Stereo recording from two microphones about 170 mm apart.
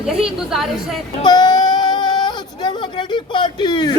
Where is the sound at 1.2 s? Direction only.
25° left (ahead or behind).